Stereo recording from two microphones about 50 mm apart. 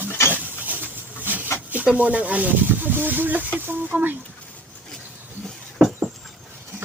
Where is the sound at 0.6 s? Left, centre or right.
Right.